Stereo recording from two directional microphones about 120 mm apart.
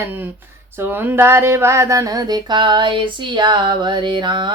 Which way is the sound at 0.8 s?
15° right (ahead or behind).